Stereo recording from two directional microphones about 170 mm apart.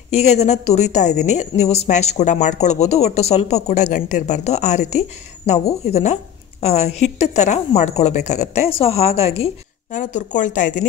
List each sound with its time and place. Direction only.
0.1 s a woman's voice: 40° left (ahead or behind)
9.9 s speech: 45° left (ahead or behind)